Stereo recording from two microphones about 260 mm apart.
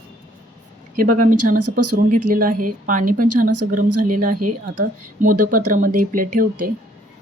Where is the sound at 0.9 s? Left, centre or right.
Right.